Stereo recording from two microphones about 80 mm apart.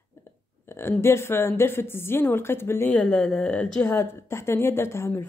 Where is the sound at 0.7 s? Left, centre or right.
Left.